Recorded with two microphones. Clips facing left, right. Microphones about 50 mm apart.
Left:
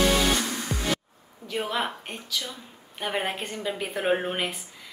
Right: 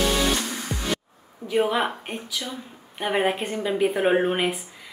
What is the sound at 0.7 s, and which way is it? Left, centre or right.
Music, right.